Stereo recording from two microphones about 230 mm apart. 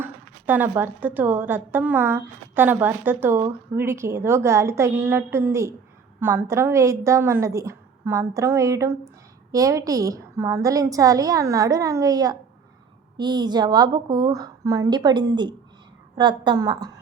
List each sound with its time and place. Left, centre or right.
0.0 s a woman's voice: centre